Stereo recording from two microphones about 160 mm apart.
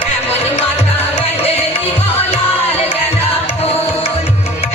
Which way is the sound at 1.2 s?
40° left (ahead or behind).